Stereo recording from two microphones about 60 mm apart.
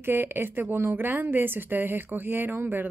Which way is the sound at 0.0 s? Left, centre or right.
Right.